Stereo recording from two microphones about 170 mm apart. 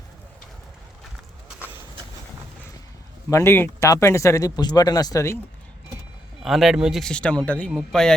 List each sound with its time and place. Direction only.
3.2 s speech: 15° left (ahead or behind)
6.4 s speech: centre (ahead or behind)